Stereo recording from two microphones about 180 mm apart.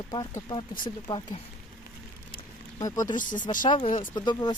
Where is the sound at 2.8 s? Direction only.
20° left (ahead or behind).